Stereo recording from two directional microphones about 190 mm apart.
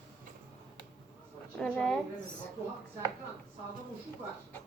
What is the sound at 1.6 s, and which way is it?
Speech, 5° left (ahead or behind).